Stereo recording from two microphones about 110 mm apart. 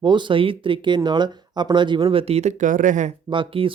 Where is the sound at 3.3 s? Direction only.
50° right (ahead or behind).